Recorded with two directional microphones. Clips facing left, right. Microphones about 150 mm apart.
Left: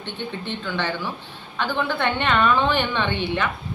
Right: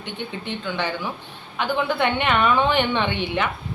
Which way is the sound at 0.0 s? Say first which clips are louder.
Left 1 dB; 15° right (ahead or behind).